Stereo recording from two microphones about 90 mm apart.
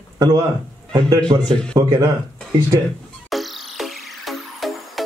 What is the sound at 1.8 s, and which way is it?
Speech, 45° right (ahead or behind).